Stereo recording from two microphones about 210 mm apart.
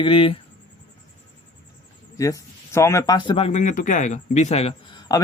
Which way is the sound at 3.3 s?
30° left (ahead or behind).